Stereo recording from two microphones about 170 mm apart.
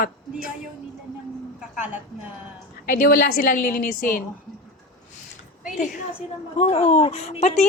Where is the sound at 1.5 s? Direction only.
5° right (ahead or behind).